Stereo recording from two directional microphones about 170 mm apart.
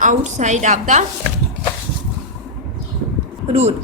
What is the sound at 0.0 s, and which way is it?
A woman's voice, 45° right (ahead or behind).